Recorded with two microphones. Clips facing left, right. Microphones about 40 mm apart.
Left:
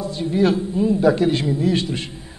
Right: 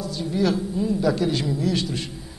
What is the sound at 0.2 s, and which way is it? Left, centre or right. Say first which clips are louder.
A man's voice: left 4 dB; left.